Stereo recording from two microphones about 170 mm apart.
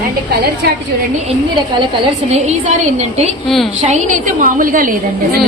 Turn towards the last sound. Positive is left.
turn(degrees=-55)  # may be behind; listen again after turning